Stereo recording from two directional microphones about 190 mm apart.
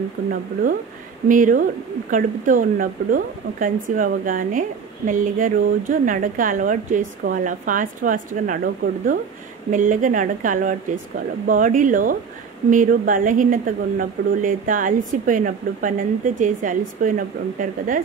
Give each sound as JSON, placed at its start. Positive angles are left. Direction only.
{"t": 1.3, "sound": "speech", "side_deg": -45}
{"t": 9.7, "sound": "speech", "side_deg": -45}